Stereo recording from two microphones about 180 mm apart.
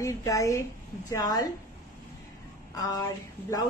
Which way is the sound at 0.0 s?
20° left (ahead or behind).